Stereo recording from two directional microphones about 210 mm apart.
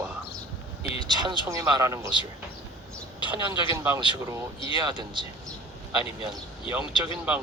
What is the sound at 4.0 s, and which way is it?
Speech, 20° right (ahead or behind).